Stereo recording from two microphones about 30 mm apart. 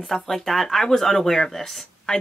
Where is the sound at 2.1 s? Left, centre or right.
Left.